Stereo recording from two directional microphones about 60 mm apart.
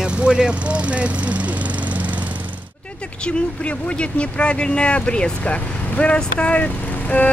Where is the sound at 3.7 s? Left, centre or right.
Centre.